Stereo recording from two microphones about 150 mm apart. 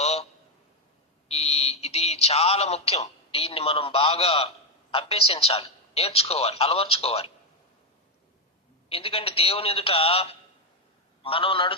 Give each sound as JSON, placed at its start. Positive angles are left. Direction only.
{"t": 0.0, "sound": "a sound", "side_deg": 45}
{"t": 1.3, "sound": "a man's voice", "side_deg": 45}
{"t": 8.9, "sound": "a man's voice", "side_deg": 40}